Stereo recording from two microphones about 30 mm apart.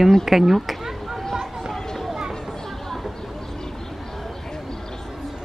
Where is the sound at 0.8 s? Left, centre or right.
Centre.